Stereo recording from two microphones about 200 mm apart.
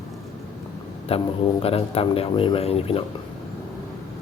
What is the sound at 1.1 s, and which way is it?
Speech, 30° left (ahead or behind).